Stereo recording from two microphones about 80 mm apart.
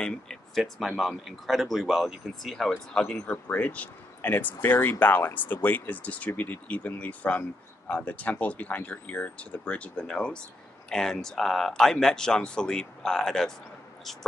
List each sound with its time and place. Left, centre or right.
0.0 s speech: centre